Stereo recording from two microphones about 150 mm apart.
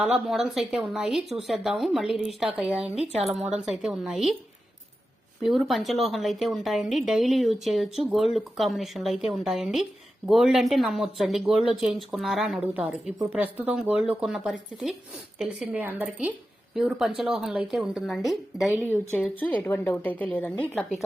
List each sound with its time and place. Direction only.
0.0 s a woman's voice: centre (ahead or behind)
3.0 s speech: 45° right (ahead or behind)
3.7 s a woman's voice: centre (ahead or behind)
5.4 s a woman's voice: centre (ahead or behind)
18.8 s a woman's voice: 10° left (ahead or behind)